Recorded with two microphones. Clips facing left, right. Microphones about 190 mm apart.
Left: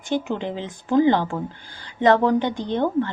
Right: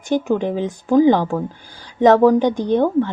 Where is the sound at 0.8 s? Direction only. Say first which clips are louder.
Right 4 dB; 10° right (ahead or behind).